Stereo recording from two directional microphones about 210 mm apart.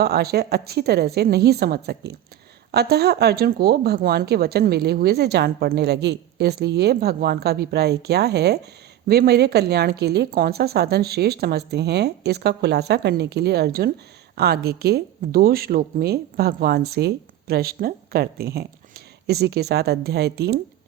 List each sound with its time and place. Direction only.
0.0 s speech: 50° right (ahead or behind)